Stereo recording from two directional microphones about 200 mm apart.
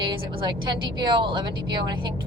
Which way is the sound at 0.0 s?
25° right (ahead or behind).